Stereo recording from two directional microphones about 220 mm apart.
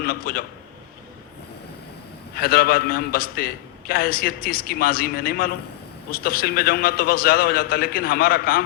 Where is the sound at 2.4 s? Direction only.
45° left (ahead or behind).